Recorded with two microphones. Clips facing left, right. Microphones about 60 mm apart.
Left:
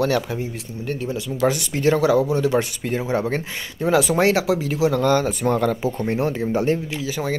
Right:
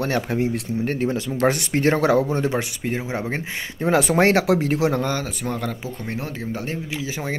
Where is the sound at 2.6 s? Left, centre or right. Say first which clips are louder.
Left 3 dB; centre.